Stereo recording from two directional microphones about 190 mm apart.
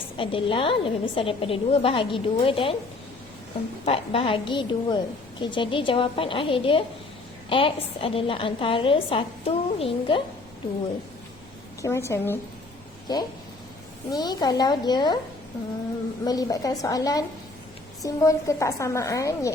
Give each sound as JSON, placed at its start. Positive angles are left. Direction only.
{"t": 0.2, "sound": "a woman's voice", "side_deg": 30}
{"t": 3.8, "sound": "a woman's voice", "side_deg": 30}
{"t": 11.8, "sound": "a woman's voice", "side_deg": 15}
{"t": 16.2, "sound": "a woman's voice", "side_deg": 20}